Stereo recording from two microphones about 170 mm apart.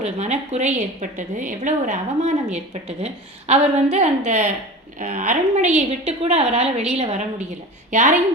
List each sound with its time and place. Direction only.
0.0 s a woman's voice: 40° right (ahead or behind)